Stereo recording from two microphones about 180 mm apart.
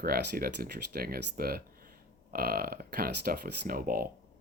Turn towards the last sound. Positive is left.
turn(degrees=-55)  # may be behind; listen again after turning